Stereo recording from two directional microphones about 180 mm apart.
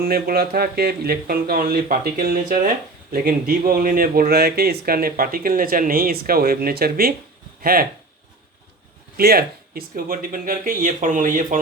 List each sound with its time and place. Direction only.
0.0 s speech: 55° right (ahead or behind)
9.1 s speech: 55° right (ahead or behind)